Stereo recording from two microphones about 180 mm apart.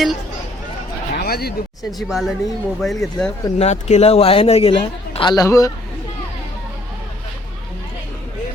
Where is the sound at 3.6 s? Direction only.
35° left (ahead or behind); by 5.7 s 20° left (ahead or behind).